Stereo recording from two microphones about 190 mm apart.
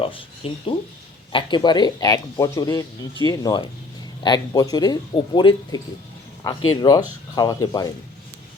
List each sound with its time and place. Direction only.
0.0 s speech: 30° left (ahead or behind)